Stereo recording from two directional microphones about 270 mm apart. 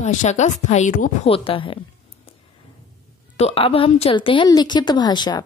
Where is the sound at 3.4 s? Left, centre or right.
Left.